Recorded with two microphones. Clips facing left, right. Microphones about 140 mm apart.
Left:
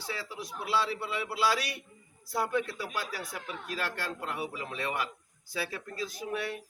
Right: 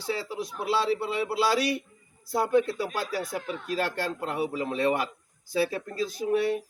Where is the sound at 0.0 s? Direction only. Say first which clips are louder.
Right 8 dB; 25° right (ahead or behind).